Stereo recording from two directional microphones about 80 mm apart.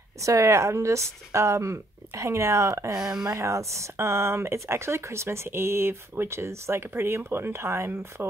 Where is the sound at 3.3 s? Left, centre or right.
Right.